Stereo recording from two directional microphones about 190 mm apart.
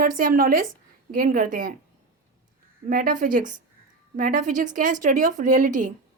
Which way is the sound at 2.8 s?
45° right (ahead or behind).